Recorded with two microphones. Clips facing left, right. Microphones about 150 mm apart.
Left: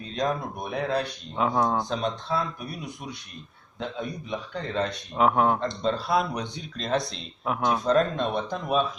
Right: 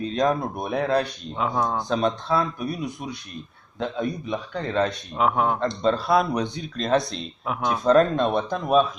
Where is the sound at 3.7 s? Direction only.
60° right (ahead or behind).